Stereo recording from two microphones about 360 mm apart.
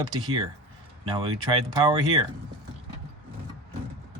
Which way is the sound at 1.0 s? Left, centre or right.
Centre.